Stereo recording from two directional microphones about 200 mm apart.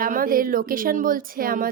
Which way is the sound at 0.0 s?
45° right (ahead or behind).